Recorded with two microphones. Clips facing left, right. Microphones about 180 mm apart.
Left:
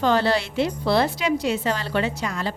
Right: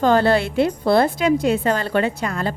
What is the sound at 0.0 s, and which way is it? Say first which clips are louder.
A woman's voice: right 4 dB; 50° right (ahead or behind).